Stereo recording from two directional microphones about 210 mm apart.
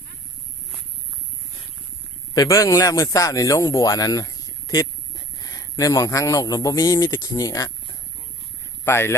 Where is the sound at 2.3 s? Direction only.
15° left (ahead or behind).